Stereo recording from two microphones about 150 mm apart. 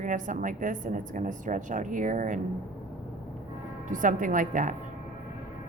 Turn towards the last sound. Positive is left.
turn(degrees=-60)  # may be behind; listen again after turning